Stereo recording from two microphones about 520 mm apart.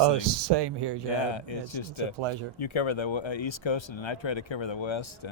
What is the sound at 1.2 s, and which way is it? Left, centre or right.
Speech, left.